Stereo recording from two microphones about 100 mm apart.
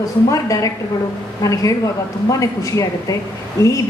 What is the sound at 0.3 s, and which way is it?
A woman's voice, 35° left (ahead or behind).